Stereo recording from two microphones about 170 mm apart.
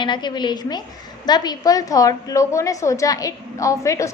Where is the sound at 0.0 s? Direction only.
25° left (ahead or behind).